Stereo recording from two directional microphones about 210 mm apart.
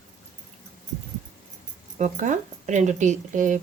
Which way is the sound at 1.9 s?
35° right (ahead or behind).